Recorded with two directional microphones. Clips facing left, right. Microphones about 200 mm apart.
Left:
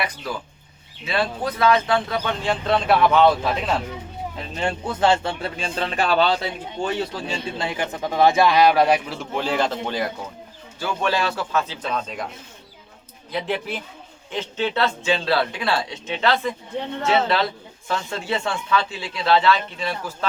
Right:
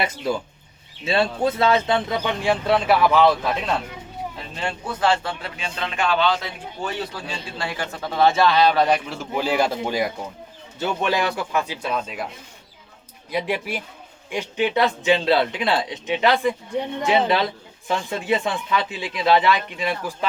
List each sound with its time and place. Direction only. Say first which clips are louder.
0.0 s a man's voice: right 4 dB; 25° right (ahead or behind); by 3.8 s centre (ahead or behind)
4.6 s speech: left 2 dB; 25° left (ahead or behind)
7.3 s a man's voice: left 3 dB; 20° left (ahead or behind); by 12.3 s 5° right (ahead or behind)
13.3 s a man's voice: right 1 dB; 10° right (ahead or behind)